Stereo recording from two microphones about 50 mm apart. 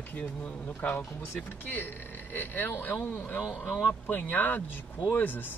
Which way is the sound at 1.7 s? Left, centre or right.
Left.